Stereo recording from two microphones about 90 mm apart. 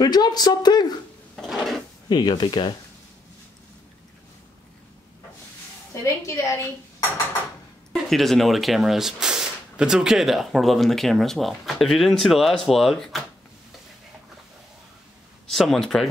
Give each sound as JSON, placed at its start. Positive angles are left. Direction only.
{"t": 0.0, "sound": "speech", "side_deg": 50}
{"t": 1.3, "sound": "a sound", "side_deg": 0}
{"t": 2.0, "sound": "speech", "side_deg": 55}
{"t": 6.0, "sound": "a woman's voice", "side_deg": 35}
{"t": 7.9, "sound": "speech", "side_deg": 5}
{"t": 15.4, "sound": "speech", "side_deg": 0}